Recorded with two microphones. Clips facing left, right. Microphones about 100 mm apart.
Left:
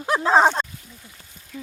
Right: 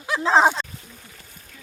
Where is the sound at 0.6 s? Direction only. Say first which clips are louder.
Left 5 dB; 45° left (ahead or behind).